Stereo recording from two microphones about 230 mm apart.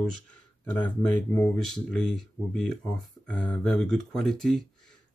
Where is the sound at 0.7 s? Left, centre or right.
Centre.